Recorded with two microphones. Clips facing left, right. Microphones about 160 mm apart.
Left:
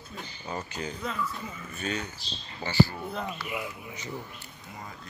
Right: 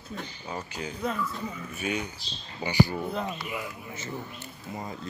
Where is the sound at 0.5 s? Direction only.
10° right (ahead or behind).